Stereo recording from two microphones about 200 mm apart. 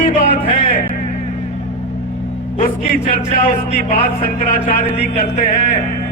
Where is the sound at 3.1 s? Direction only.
45° left (ahead or behind).